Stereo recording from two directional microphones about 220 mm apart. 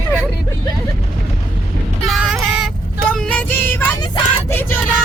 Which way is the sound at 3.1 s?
5° left (ahead or behind).